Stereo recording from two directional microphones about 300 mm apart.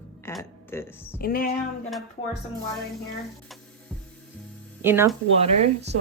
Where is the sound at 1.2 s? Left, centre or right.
Left.